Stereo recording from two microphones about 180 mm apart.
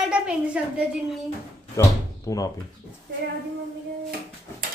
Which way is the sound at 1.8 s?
20° left (ahead or behind).